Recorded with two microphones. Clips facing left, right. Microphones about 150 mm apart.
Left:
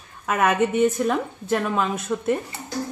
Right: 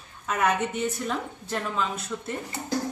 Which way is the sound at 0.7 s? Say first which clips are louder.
Left 9 dB; 60° left (ahead or behind).